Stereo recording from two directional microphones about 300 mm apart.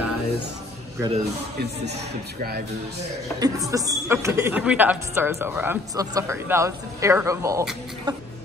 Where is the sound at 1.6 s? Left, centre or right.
Right.